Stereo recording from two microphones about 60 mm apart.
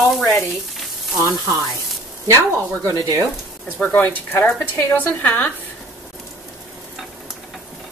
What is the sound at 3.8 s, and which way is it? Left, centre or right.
A woman's voice, left.